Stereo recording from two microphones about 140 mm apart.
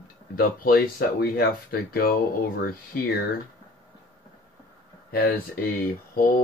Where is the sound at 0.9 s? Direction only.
90° left.